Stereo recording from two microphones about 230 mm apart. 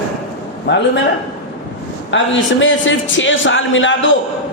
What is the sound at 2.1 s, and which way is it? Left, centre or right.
A man's voice, left.